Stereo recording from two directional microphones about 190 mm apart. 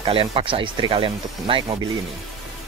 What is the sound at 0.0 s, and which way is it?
Speech, 30° right (ahead or behind).